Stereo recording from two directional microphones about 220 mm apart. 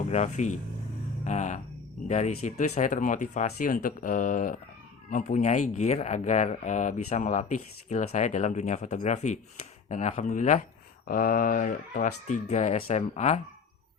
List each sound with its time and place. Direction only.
0.1 s speech: 30° left (ahead or behind)
1.2 s a sound: 35° left (ahead or behind)
2.0 s speech: 30° left (ahead or behind)